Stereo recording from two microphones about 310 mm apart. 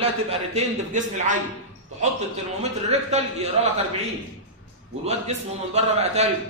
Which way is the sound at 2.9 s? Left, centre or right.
Centre.